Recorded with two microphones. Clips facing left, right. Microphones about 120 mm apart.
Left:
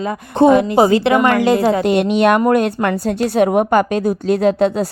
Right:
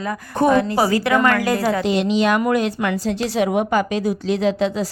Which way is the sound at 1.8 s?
55° left (ahead or behind).